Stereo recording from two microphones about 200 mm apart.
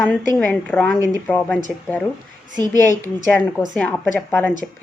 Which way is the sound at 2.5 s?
20° right (ahead or behind).